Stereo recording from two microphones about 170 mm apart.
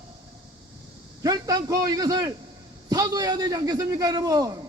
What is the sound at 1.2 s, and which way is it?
A man's voice, 20° right (ahead or behind).